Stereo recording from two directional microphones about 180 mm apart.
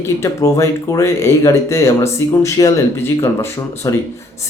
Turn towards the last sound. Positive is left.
turn(degrees=15)  # may be behind; listen again after turning